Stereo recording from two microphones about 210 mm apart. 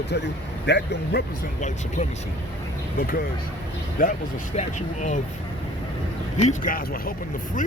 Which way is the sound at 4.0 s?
45° left (ahead or behind).